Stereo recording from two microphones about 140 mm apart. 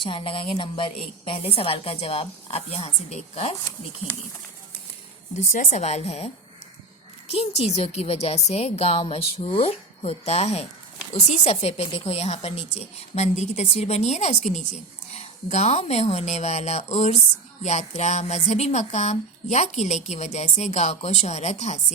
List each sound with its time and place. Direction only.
0.0 s a woman's voice: 40° left (ahead or behind)
5.5 s a woman's voice: 60° left (ahead or behind)